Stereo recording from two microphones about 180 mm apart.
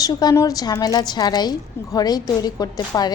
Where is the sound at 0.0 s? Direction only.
20° left (ahead or behind).